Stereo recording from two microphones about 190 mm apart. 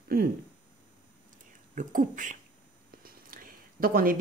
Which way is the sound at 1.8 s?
45° right (ahead or behind).